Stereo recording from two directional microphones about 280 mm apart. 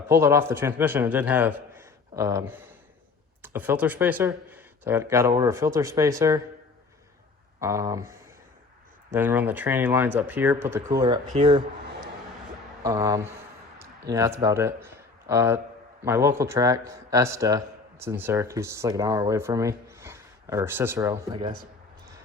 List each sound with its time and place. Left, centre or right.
0.1 s speech: centre
7.6 s speech: centre
12.8 s speech: centre